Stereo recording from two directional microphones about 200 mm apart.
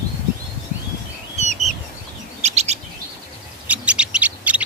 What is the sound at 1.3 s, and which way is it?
Bird, 35° right (ahead or behind).